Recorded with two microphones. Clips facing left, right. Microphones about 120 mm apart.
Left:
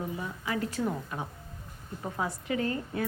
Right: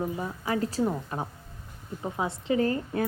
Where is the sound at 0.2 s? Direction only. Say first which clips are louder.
Right 4 dB; 35° right (ahead or behind).